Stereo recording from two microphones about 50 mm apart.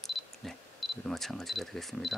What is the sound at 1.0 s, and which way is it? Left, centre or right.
Speech, centre.